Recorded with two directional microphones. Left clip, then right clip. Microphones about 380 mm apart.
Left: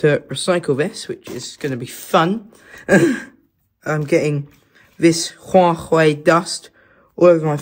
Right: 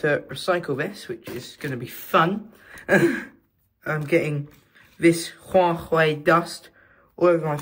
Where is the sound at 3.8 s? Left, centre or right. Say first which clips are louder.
Left 5 dB; centre.